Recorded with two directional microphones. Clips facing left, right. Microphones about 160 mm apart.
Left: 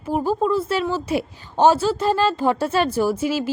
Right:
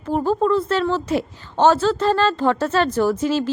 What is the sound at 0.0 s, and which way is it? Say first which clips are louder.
Speech: right 2 dB; 10° left (ahead or behind).